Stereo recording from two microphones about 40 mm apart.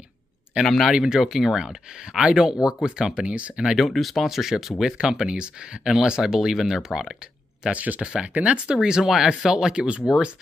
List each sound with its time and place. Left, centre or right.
0.7 s speech: centre
0.9 s speech: right
1.2 s speech: centre
3.3 s speech: right
3.7 s speech: centre
4.9 s speech: centre
7.7 s speech: right
8.0 s speech: centre
8.3 s speech: right
8.8 s speech: centre; by 10.0 s right